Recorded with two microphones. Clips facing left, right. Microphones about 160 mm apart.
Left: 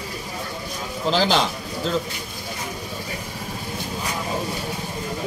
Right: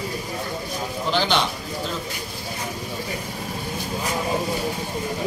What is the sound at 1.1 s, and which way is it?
Speech, 35° left (ahead or behind).